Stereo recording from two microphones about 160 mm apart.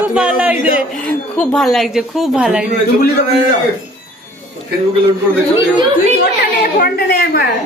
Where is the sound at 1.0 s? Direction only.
5° left (ahead or behind).